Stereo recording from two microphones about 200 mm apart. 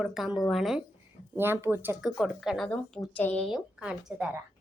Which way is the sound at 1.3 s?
10° right (ahead or behind).